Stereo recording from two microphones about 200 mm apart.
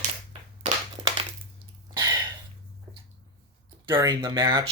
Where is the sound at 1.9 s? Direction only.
20° right (ahead or behind).